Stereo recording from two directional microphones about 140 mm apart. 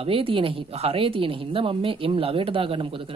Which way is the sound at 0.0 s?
40° right (ahead or behind).